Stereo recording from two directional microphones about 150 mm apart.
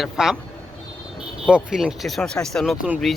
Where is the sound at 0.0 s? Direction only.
5° right (ahead or behind).